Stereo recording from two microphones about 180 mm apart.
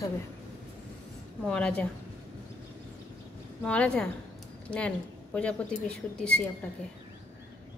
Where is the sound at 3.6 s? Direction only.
5° left (ahead or behind).